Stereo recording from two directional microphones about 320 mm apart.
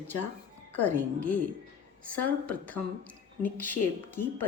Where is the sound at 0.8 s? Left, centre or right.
Centre.